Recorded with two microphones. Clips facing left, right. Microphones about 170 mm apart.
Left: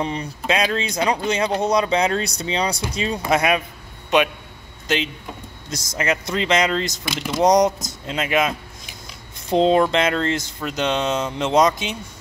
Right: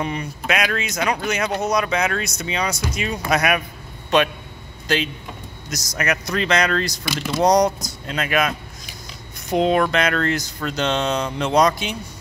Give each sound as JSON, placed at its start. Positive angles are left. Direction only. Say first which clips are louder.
{"t": 0.0, "sound": "a man's voice", "louder": "left 1 dB", "side_deg": 30}